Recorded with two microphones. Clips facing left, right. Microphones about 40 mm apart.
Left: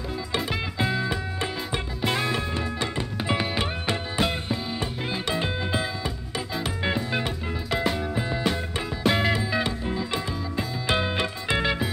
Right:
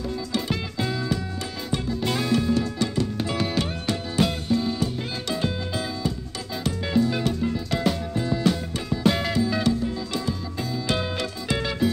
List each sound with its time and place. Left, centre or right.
0.5 s music: centre
10.9 s music: left